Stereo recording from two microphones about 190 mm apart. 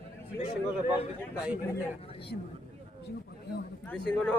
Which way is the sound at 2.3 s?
55° left (ahead or behind).